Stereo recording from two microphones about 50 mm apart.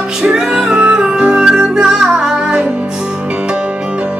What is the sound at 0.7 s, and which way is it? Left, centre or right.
Music, right.